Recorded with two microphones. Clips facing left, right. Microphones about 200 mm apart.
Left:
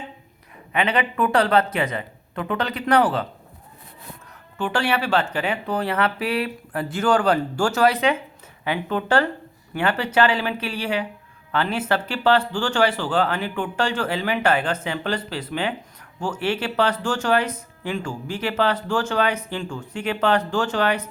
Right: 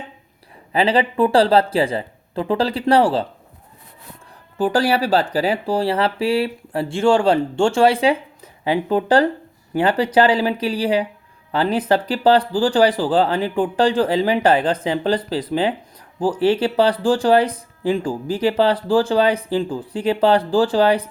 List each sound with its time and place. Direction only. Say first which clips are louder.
0.7 s speech: right 5 dB; 30° right (ahead or behind)
4.5 s speech: right 5 dB; 35° right (ahead or behind)